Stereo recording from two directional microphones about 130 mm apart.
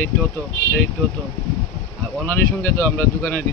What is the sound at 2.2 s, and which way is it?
Speech, 15° left (ahead or behind).